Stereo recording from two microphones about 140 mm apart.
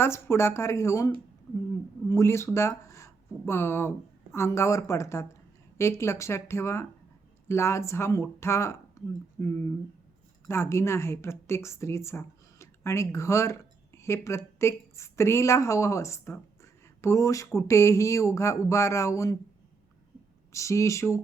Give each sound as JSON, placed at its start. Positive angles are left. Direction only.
{"t": 0.0, "sound": "a woman's voice", "side_deg": 15}
{"t": 20.5, "sound": "speech", "side_deg": 20}